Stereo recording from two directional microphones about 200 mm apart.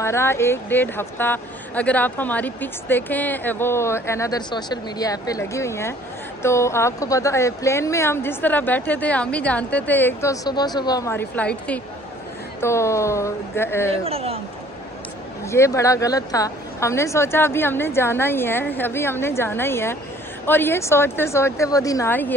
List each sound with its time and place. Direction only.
0.0 s speech: 10° left (ahead or behind)
14.0 s speech: 30° right (ahead or behind)
15.4 s speech: 15° left (ahead or behind)